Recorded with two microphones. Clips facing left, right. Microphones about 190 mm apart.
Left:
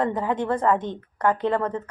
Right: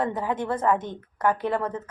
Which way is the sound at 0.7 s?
20° left (ahead or behind).